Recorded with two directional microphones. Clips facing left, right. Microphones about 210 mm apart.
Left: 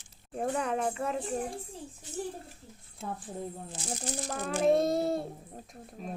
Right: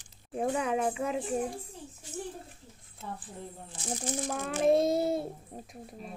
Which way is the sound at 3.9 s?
5° right (ahead or behind).